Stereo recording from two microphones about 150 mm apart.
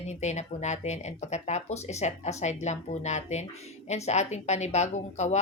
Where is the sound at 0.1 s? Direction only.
50° left (ahead or behind).